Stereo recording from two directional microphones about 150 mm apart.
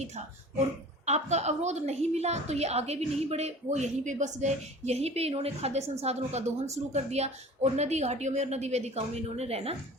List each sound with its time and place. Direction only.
1.0 s a woman's voice: 50° right (ahead or behind)